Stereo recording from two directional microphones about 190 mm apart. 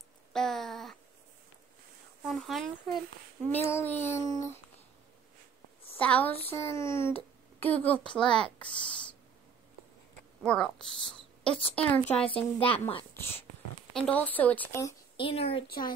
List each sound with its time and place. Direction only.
0.3 s a sound: centre (ahead or behind)
2.2 s a woman's voice: centre (ahead or behind)
3.4 s child singing: 10° left (ahead or behind)
5.9 s child singing: 5° left (ahead or behind)
6.4 s a child's voice: 15° left (ahead or behind)
10.4 s a woman's voice: 5° left (ahead or behind)
12.3 s speech: 30° left (ahead or behind)
13.1 s speech: 10° left (ahead or behind)
13.9 s child singing: 5° left (ahead or behind)
15.1 s speech: 30° left (ahead or behind)
15.6 s a woman's voice: 50° left (ahead or behind)